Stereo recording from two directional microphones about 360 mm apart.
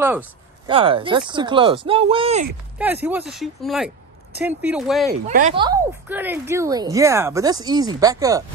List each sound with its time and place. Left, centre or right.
0.0 s speech: centre
2.8 s speech: centre
5.1 s speech: right